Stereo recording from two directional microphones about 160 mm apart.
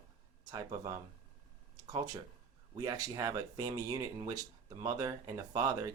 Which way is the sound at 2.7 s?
25° right (ahead or behind).